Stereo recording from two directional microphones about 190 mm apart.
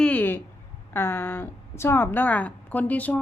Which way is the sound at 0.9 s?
10° left (ahead or behind).